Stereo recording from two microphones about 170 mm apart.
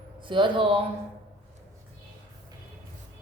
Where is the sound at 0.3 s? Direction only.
30° right (ahead or behind).